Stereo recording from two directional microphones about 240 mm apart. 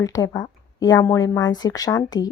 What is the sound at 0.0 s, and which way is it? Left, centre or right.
Speech, centre.